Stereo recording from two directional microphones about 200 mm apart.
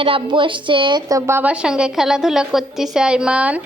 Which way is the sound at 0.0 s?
25° right (ahead or behind).